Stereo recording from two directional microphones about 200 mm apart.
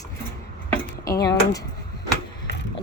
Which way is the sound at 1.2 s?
20° left (ahead or behind).